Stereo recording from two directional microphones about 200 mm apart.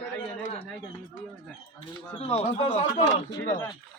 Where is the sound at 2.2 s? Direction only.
30° left (ahead or behind).